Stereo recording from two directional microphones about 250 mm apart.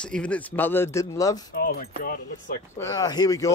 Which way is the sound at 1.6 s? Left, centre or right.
Left.